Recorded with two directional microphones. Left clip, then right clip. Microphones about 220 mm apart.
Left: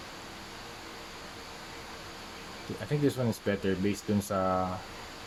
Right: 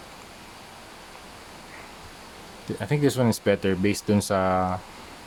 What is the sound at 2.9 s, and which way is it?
Speech, 35° right (ahead or behind).